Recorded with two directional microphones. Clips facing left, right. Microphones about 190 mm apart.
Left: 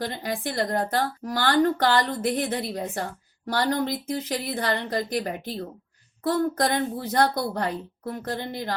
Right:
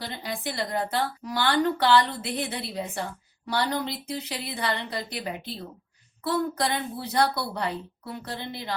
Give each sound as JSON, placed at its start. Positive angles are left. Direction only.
{"t": 0.0, "sound": "a woman's voice", "side_deg": 50}